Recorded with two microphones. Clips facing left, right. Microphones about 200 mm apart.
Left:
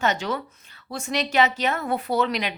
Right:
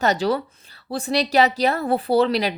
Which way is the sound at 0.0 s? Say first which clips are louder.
Right 5 dB; 35° right (ahead or behind).